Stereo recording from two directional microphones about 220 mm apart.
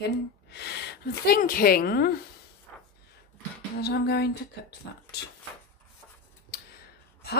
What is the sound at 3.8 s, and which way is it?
Speech, 45° left (ahead or behind).